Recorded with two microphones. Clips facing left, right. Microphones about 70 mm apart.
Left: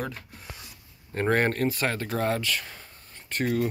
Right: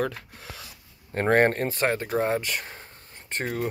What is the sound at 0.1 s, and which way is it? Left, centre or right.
Speech, right.